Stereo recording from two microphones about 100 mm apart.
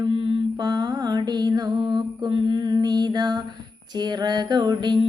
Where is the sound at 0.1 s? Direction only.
60° right (ahead or behind).